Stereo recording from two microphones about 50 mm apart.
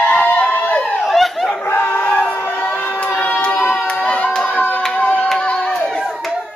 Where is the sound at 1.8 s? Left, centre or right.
Left.